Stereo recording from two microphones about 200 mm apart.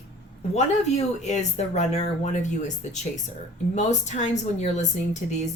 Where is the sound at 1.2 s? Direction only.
35° left (ahead or behind).